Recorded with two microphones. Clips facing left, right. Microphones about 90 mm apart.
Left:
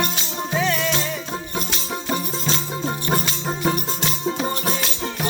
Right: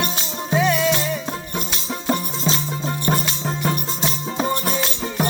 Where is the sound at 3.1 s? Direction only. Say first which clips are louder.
Even; 10° left (ahead or behind).